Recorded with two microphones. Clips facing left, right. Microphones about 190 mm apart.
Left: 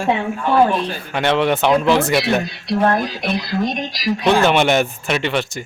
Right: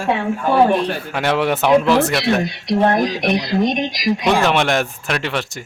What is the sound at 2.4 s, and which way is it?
Speech, 20° right (ahead or behind).